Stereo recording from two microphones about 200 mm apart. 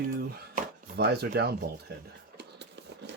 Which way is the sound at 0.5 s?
55° right (ahead or behind).